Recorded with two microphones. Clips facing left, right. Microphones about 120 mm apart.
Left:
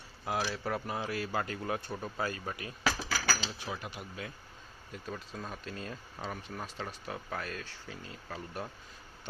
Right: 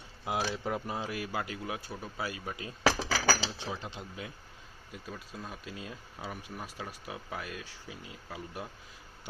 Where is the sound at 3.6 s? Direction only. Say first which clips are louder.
Right 1 dB; 25° right (ahead or behind).